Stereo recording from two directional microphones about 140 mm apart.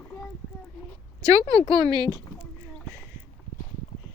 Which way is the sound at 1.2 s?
25° right (ahead or behind).